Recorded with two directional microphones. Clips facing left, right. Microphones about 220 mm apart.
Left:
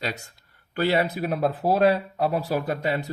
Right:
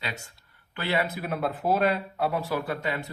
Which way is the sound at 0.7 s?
40° left (ahead or behind).